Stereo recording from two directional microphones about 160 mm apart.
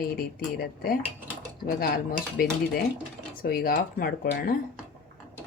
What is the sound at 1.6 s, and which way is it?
Dishes, 65° left (ahead or behind).